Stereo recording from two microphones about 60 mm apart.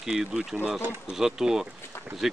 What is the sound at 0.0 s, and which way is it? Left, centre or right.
Speech, centre.